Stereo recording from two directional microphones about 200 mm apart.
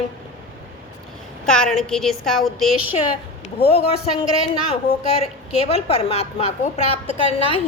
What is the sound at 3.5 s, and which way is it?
A man's voice, 30° left (ahead or behind).